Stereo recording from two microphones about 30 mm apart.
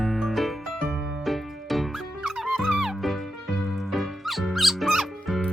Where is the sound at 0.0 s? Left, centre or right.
Centre.